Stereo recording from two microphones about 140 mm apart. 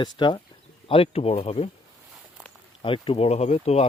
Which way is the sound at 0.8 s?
40° left (ahead or behind).